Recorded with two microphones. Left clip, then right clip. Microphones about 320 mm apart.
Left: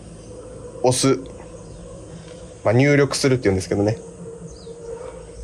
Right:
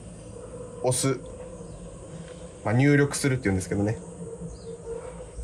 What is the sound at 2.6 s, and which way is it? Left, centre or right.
Speech, left.